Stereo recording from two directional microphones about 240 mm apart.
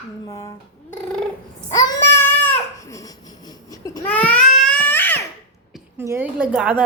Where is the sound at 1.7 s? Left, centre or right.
Centre.